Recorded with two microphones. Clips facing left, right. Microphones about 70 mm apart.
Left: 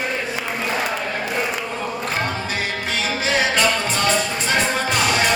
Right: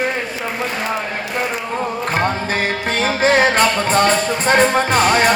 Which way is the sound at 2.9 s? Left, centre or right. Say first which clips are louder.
Right 7 dB; right.